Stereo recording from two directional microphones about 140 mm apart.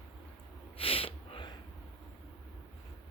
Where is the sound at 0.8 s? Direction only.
40° left (ahead or behind).